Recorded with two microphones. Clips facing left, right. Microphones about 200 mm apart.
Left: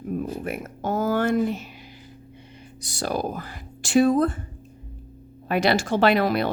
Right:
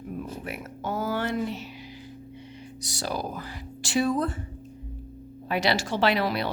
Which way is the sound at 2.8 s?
55° left (ahead or behind).